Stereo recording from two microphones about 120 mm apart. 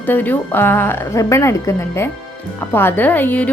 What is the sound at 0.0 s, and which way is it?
A woman's voice, 15° left (ahead or behind).